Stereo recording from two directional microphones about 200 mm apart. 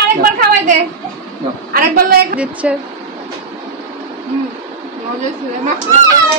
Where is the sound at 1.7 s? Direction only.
50° right (ahead or behind).